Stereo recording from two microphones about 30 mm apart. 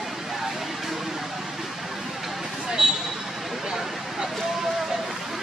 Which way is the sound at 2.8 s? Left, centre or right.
Right.